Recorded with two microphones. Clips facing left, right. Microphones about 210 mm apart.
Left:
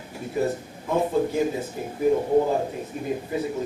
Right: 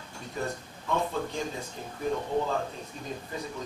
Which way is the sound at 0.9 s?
10° left (ahead or behind).